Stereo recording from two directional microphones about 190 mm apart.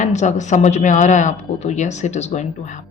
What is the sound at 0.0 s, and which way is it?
Speech, 40° left (ahead or behind).